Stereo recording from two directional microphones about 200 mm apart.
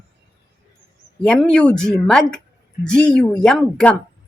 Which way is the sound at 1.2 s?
5° left (ahead or behind).